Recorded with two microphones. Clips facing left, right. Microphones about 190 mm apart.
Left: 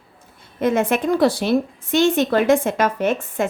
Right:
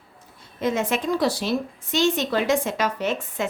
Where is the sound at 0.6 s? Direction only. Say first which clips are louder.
Left 5 dB; 55° left (ahead or behind).